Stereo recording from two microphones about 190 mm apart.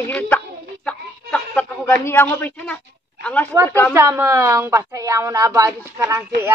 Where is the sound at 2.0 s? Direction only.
10° left (ahead or behind).